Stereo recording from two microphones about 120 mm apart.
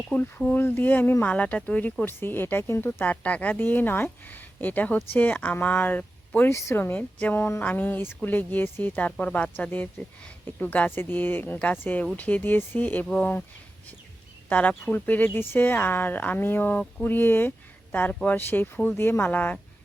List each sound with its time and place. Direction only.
0.1 s speech: 15° left (ahead or behind)
14.5 s speech: 10° left (ahead or behind)